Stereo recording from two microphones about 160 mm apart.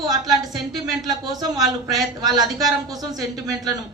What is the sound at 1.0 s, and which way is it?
Speech, 20° right (ahead or behind).